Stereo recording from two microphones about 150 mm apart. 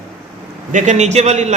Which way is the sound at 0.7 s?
50° right (ahead or behind).